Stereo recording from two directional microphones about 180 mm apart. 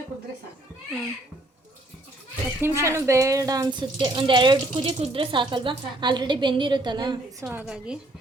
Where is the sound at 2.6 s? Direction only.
15° right (ahead or behind).